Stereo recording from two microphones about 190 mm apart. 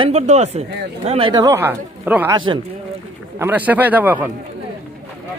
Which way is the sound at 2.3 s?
25° right (ahead or behind).